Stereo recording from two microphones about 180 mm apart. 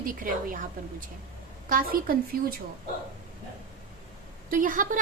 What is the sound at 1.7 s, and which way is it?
Speech, 55° right (ahead or behind).